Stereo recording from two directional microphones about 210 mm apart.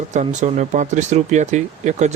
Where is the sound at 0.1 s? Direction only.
35° right (ahead or behind).